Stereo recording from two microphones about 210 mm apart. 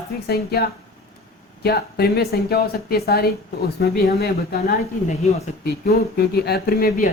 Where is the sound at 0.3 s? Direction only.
50° left (ahead or behind).